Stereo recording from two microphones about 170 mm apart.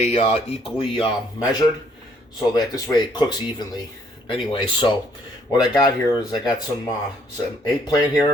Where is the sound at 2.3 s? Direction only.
25° left (ahead or behind).